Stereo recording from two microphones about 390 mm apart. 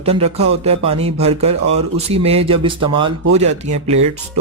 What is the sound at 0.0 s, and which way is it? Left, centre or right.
Speech, centre.